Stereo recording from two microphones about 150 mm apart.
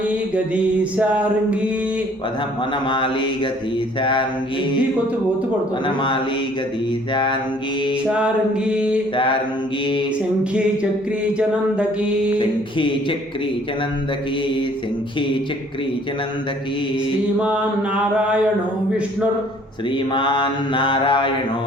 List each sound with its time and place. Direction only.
0.1 s mantra: 10° right (ahead or behind)
2.9 s mantra: 35° left (ahead or behind)
7.1 s mantra: 30° left (ahead or behind)
8.0 s mantra: 5° right (ahead or behind)
9.1 s mantra: 35° left (ahead or behind)
11.3 s mantra: 5° right (ahead or behind)
12.4 s mantra: 35° left (ahead or behind)
17.4 s mantra: 5° right (ahead or behind)
20.1 s mantra: 30° left (ahead or behind)